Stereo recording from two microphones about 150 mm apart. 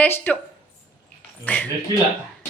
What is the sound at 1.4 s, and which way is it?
Speech, 10° left (ahead or behind).